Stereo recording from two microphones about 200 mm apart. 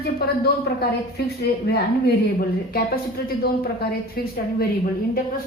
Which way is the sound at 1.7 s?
50° left (ahead or behind).